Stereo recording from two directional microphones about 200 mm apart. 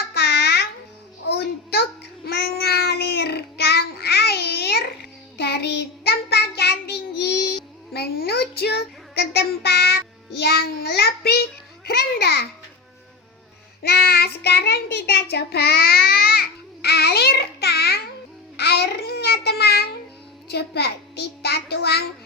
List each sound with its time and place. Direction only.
0.1 s a sound: 55° left (ahead or behind)
1.3 s child singing: 50° left (ahead or behind)
11.9 s a sound: 55° left (ahead or behind)
13.8 s child singing: 50° left (ahead or behind)
18.5 s babbling: 55° left (ahead or behind)
20.5 s child singing: 55° left (ahead or behind)